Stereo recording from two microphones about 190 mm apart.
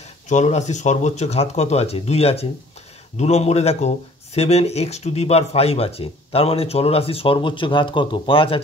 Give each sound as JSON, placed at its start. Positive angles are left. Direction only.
{"t": 0.3, "sound": "speech", "side_deg": 40}